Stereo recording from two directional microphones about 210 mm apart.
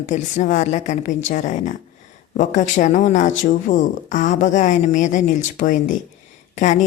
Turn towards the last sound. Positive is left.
turn(degrees=35)  # may be behind; listen again after turning